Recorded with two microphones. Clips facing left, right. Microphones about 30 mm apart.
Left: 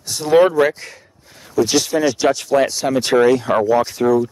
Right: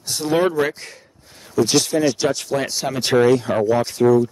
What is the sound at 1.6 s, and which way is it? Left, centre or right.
Speech, centre.